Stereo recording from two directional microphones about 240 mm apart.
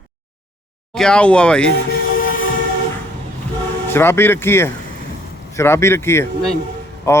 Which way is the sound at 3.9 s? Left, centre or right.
Centre.